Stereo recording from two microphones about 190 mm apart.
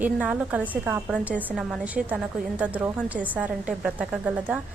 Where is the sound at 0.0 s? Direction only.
5° right (ahead or behind).